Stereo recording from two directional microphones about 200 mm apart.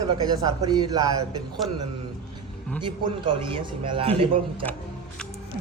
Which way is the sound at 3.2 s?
25° right (ahead or behind).